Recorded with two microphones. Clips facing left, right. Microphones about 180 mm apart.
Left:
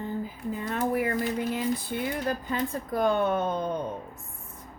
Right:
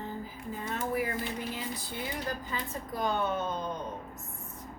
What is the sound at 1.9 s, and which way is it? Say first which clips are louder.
Speech: left 7 dB; 60° left (ahead or behind).